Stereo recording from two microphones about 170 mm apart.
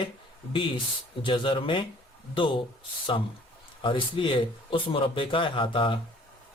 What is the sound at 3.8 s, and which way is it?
Speech, 30° left (ahead or behind).